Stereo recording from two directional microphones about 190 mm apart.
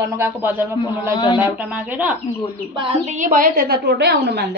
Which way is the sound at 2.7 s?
30° right (ahead or behind).